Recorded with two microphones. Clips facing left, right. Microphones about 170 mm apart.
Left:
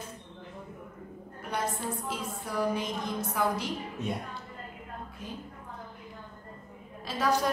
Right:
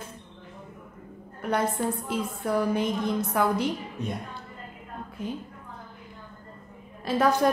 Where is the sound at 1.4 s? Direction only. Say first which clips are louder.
Right 9 dB; 60° right (ahead or behind).